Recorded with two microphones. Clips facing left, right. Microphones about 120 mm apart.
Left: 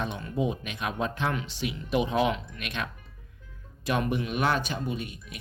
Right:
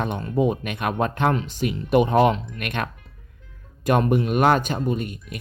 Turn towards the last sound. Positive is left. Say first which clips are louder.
# right 8 dB
turn(degrees=-50)  # may be behind; listen again after turning